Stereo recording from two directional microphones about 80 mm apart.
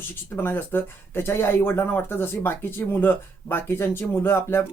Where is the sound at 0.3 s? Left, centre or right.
Left.